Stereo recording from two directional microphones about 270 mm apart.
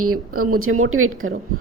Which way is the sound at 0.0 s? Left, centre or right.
Right.